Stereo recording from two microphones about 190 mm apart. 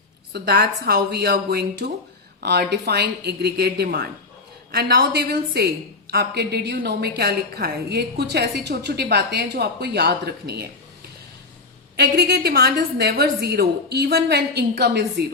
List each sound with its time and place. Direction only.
0.3 s a woman's voice: 60° right (ahead or behind)
11.9 s a woman's voice: 60° right (ahead or behind)